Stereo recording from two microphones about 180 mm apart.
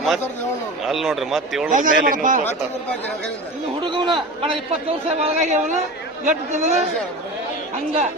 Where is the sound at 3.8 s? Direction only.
25° right (ahead or behind).